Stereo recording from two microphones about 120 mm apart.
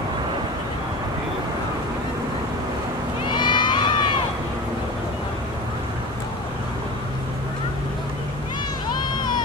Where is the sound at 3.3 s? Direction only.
40° left (ahead or behind).